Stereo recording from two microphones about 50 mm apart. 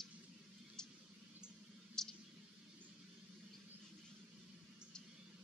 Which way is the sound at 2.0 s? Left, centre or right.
Centre.